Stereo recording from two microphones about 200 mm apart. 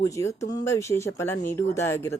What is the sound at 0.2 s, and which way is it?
Speech, 15° left (ahead or behind).